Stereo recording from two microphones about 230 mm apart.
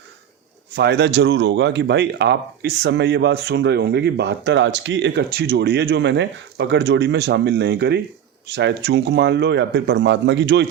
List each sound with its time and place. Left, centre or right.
0.8 s speech: right